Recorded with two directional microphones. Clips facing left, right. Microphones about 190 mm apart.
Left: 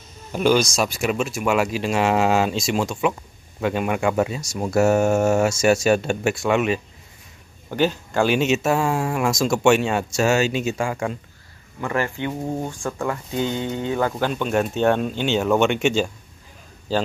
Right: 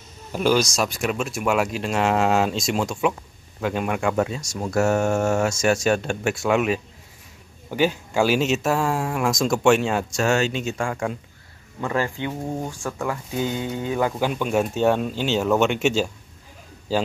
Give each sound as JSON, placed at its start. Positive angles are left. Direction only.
{"t": 0.3, "sound": "speech", "side_deg": 0}
{"t": 12.3, "sound": "speech", "side_deg": 5}
{"t": 12.6, "sound": "speech", "side_deg": -5}
{"t": 13.6, "sound": "speech", "side_deg": 25}
{"t": 13.9, "sound": "speech", "side_deg": -10}